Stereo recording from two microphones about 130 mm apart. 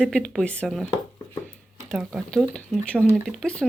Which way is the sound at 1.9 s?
Centre (ahead or behind).